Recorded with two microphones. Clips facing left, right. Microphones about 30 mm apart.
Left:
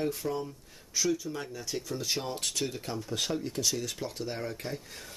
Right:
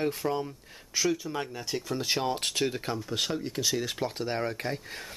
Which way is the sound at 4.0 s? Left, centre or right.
Right.